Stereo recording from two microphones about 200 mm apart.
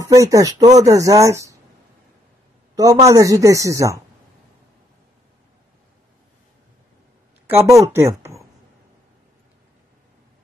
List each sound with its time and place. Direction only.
0.0 s speech: 15° right (ahead or behind)
2.7 s speech: 15° right (ahead or behind)
7.4 s speech: 15° right (ahead or behind)